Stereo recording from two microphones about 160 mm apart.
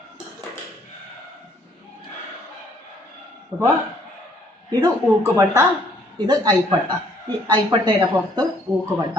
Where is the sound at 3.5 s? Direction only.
15° right (ahead or behind).